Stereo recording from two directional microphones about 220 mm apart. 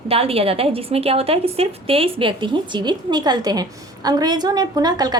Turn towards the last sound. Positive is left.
turn(degrees=-20)  # may be behind; listen again after turning